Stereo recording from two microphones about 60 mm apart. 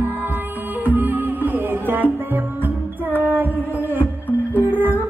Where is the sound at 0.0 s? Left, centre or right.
Right.